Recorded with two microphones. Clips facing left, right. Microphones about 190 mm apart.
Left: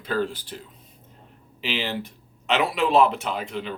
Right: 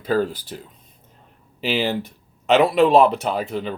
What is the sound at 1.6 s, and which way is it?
Speech, 40° right (ahead or behind).